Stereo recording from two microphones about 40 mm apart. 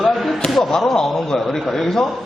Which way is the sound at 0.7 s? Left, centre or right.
Centre.